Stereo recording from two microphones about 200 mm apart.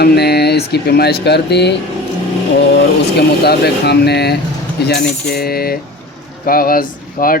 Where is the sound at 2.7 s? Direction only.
55° left (ahead or behind).